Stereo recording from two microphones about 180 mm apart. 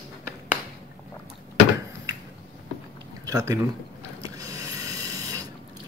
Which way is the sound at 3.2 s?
20° right (ahead or behind).